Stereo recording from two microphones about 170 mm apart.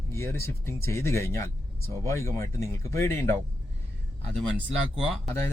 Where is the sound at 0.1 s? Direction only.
15° left (ahead or behind).